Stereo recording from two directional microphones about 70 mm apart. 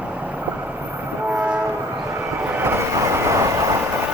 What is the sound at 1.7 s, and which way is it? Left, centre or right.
Train, right.